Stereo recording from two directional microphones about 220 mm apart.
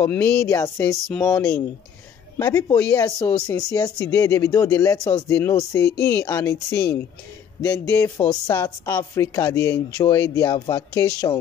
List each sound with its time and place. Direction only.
0.0 s speech: 10° left (ahead or behind)